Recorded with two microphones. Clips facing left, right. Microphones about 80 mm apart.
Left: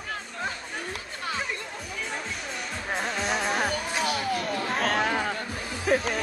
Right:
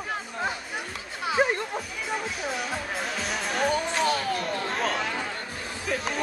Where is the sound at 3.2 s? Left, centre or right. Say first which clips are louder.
Right 1 dB; centre.